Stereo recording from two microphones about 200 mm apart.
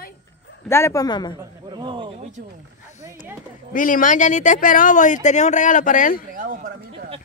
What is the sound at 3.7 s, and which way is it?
Speech, 40° left (ahead or behind).